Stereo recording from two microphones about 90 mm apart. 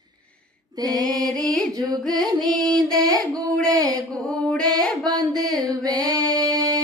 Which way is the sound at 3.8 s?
45° right (ahead or behind).